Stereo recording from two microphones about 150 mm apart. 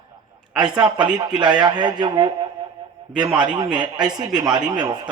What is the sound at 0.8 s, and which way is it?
A man's voice, 30° right (ahead or behind).